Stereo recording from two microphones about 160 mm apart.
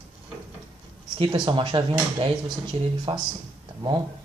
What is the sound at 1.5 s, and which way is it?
Speech, 30° right (ahead or behind).